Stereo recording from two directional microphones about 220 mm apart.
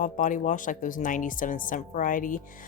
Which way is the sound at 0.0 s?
35° left (ahead or behind).